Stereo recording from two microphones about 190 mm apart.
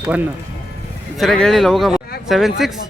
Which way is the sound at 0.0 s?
10° right (ahead or behind).